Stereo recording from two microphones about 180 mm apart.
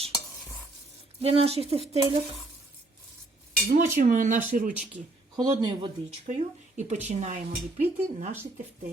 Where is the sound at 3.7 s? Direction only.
45° right (ahead or behind).